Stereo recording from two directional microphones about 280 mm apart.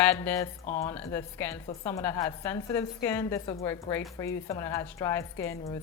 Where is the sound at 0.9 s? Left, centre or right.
Centre.